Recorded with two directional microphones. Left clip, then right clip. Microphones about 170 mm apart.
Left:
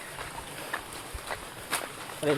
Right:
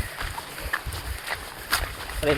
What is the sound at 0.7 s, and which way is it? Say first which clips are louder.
Horse: right 7 dB; 70° right (ahead or behind).